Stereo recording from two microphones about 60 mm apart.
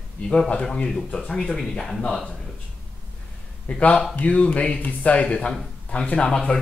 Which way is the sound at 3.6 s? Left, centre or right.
Left.